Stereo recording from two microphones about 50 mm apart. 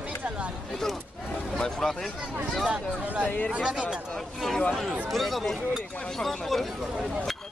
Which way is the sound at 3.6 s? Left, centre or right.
Centre.